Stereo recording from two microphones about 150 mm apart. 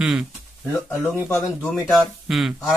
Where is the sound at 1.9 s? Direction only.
Centre (ahead or behind).